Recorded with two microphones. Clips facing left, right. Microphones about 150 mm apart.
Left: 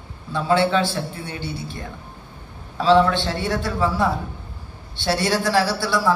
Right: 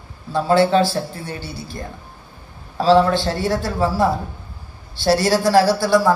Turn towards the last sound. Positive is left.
turn(degrees=-45)  # may be behind; listen again after turning